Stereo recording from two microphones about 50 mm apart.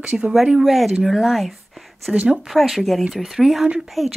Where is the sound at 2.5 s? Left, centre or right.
Centre.